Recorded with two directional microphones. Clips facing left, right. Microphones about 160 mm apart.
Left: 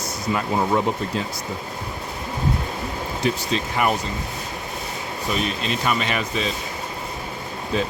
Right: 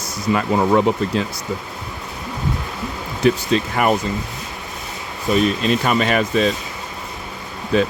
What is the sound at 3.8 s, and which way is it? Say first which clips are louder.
Speech: right 3 dB; 55° right (ahead or behind).